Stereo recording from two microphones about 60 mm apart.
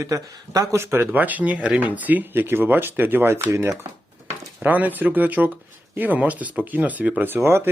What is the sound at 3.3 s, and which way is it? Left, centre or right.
Speech, right.